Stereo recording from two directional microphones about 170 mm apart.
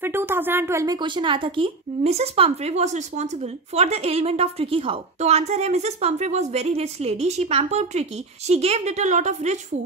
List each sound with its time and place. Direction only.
0.0 s a woman's voice: 15° right (ahead or behind); by 9.6 s 45° right (ahead or behind)